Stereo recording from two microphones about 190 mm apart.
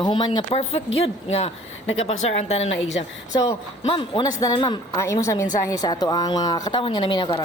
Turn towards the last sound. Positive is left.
turn(degrees=25)  # may be behind; listen again after turning